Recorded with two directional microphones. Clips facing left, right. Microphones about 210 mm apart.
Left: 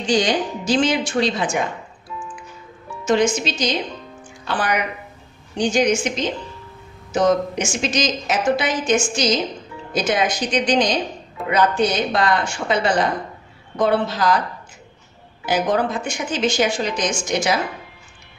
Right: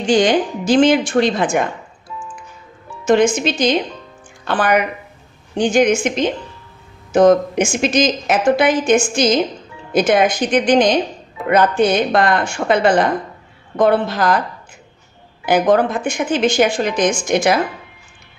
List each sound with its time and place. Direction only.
0.0 s speech: 55° right (ahead or behind)
3.1 s speech: 55° right (ahead or behind)
15.4 s speech: 55° right (ahead or behind)